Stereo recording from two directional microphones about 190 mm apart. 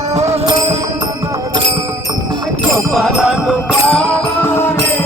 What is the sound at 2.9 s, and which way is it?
Music, centre (ahead or behind).